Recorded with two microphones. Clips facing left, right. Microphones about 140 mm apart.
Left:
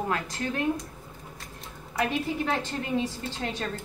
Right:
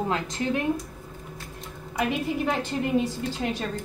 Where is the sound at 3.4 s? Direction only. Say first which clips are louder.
Right 3 dB; 5° right (ahead or behind).